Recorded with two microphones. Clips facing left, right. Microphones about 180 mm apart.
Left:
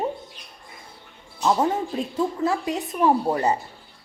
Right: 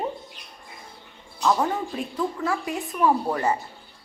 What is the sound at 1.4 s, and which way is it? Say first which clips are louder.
A woman's voice: left 2 dB; 25° left (ahead or behind).